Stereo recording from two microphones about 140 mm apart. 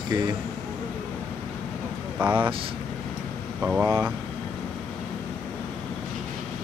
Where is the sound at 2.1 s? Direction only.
10° right (ahead or behind).